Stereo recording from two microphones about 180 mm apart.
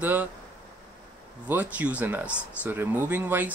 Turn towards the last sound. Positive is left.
turn(degrees=-10)  # may be behind; listen again after turning